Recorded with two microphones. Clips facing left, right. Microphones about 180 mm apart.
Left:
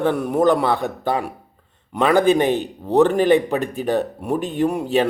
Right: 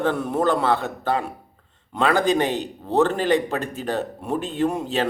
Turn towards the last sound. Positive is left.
turn(degrees=15)  # may be behind; listen again after turning